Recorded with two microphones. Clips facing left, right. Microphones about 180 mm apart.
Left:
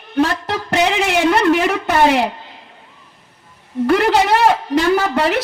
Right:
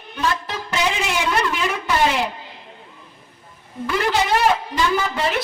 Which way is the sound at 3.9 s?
65° left (ahead or behind).